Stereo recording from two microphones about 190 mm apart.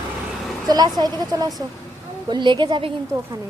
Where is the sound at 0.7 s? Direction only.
20° right (ahead or behind).